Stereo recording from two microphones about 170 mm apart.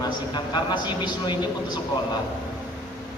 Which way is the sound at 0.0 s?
25° left (ahead or behind).